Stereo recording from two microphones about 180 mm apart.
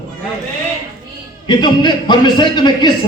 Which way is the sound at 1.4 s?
25° left (ahead or behind).